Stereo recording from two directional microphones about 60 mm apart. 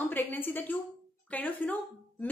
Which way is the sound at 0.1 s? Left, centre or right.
Left.